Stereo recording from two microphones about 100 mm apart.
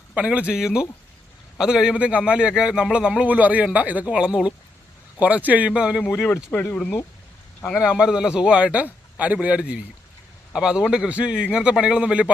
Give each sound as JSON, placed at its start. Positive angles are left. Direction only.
{"t": 0.1, "sound": "a man's voice", "side_deg": -10}
{"t": 6.2, "sound": "speech", "side_deg": 15}
{"t": 7.8, "sound": "a man's voice", "side_deg": -5}